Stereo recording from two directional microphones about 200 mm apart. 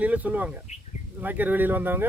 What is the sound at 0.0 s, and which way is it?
A man's voice, 5° right (ahead or behind).